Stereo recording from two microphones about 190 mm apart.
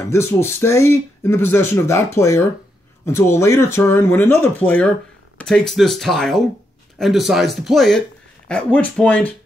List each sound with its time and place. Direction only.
0.1 s speech: 15° left (ahead or behind)